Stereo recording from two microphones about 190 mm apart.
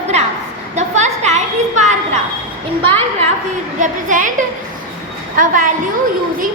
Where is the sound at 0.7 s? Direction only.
40° right (ahead or behind).